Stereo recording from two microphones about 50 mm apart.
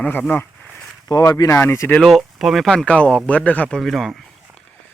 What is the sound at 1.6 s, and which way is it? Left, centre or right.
Speech, left.